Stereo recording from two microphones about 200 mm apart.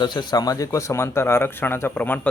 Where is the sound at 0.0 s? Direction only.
20° left (ahead or behind).